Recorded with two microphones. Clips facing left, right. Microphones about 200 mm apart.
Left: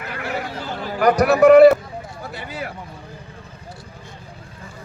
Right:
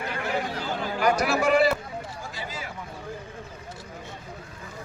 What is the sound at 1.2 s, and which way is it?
Speech, 60° left (ahead or behind).